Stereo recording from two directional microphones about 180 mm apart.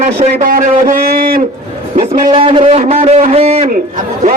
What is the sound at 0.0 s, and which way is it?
A man's voice, 45° right (ahead or behind).